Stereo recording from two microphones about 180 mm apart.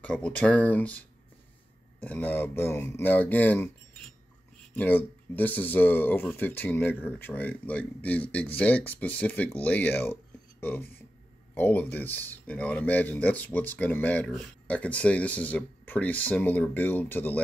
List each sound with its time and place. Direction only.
0.0 s speech: 5° left (ahead or behind)
4.7 s speech: 10° left (ahead or behind)
11.5 s speech: 10° left (ahead or behind)